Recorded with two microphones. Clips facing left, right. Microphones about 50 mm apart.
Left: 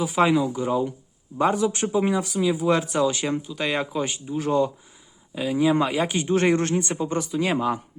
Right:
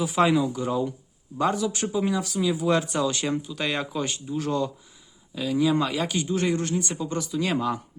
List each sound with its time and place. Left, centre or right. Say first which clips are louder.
0.0 s speech: left 1 dB; centre
1.5 s speech: left 4 dB; left
2.4 s speech: left 1 dB; centre
6.1 s speech: left 6 dB; left
6.7 s speech: left 3 dB; left